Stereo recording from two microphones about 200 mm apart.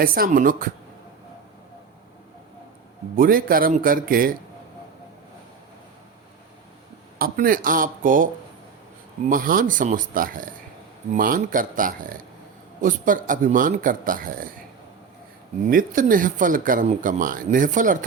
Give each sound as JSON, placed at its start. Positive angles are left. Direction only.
{"t": 0.0, "sound": "a man's voice", "side_deg": -45}
{"t": 3.2, "sound": "a man's voice", "side_deg": -45}
{"t": 7.2, "sound": "a man's voice", "side_deg": -45}
{"t": 9.3, "sound": "a man's voice", "side_deg": -45}
{"t": 15.7, "sound": "speech", "side_deg": -40}